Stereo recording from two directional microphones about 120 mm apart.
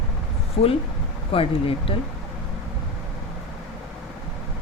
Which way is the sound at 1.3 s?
50° left (ahead or behind).